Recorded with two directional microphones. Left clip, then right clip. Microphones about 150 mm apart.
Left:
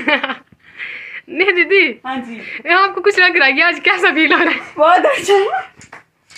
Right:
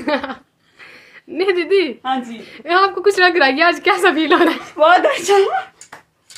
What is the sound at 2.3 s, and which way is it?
A woman's voice, 15° right (ahead or behind).